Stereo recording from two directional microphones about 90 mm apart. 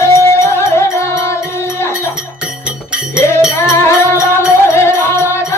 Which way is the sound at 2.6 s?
10° right (ahead or behind).